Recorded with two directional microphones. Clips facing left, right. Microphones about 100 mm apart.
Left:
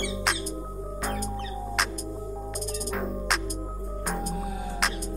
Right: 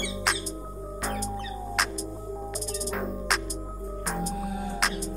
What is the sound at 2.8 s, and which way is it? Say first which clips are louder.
Music: even; centre (ahead or behind).